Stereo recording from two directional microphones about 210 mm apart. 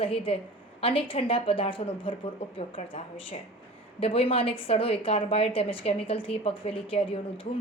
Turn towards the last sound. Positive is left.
turn(degrees=25)  # may be behind; listen again after turning